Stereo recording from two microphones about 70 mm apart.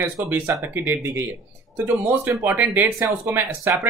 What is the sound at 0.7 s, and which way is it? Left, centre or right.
Speech, right.